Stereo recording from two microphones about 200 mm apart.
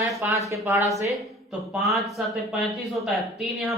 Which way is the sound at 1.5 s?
Centre (ahead or behind).